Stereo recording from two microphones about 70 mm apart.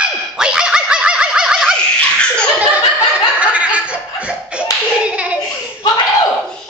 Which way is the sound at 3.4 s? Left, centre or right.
Centre.